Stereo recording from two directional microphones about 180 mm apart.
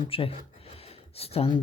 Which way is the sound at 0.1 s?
30° left (ahead or behind).